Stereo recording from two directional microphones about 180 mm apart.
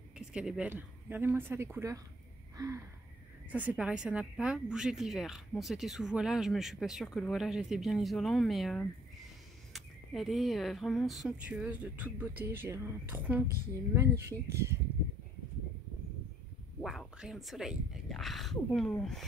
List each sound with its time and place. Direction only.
0.3 s speech: 5° right (ahead or behind)
2.5 s a sound: 15° right (ahead or behind)
3.4 s speech: 10° right (ahead or behind)
16.8 s speech: centre (ahead or behind)